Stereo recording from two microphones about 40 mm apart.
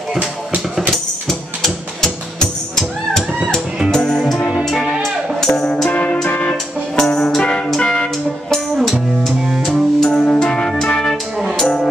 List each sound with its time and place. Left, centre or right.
2.7 s music: centre
5.9 s music: left
7.0 s music: centre
9.2 s music: centre
9.9 s music: centre